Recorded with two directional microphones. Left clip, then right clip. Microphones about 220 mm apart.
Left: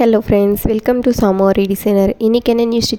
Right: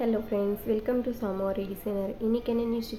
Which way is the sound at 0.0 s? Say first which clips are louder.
Left 16 dB; 45° left (ahead or behind).